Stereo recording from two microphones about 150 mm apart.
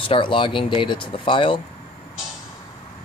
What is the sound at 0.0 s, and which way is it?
Speech, 35° left (ahead or behind).